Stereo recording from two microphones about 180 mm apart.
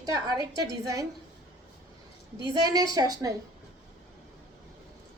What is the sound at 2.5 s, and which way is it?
Speech, 20° right (ahead or behind).